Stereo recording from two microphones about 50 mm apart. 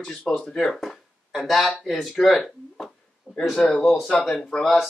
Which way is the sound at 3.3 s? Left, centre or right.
Right.